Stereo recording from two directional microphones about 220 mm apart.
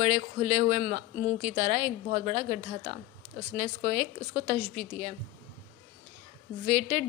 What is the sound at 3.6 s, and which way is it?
Speech, 30° right (ahead or behind).